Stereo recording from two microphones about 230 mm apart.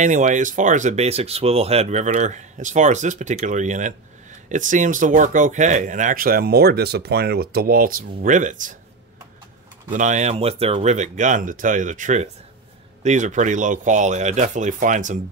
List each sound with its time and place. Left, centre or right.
0.0 s speech: right
9.8 s speech: right